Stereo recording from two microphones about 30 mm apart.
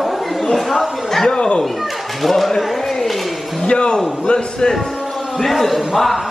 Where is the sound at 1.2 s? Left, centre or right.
Left.